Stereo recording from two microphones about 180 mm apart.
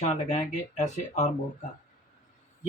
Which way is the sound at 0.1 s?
40° left (ahead or behind).